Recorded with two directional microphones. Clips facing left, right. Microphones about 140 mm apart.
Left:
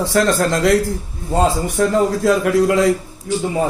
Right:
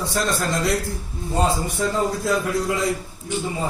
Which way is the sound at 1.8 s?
65° left (ahead or behind).